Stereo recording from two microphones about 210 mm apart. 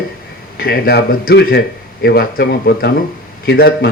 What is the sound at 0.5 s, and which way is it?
A man's voice, 50° left (ahead or behind).